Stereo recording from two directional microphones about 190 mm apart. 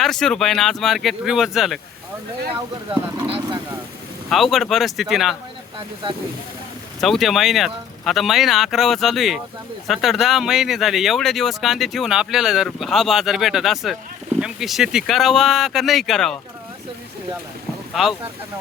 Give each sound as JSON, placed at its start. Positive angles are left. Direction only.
{"t": 0.0, "sound": "speech", "side_deg": 5}
{"t": 2.9, "sound": "speech", "side_deg": -25}
{"t": 4.3, "sound": "speech", "side_deg": 0}
{"t": 7.0, "sound": "speech", "side_deg": 0}